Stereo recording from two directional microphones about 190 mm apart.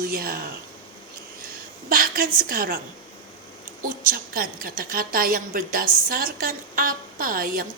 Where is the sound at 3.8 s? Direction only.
50° right (ahead or behind).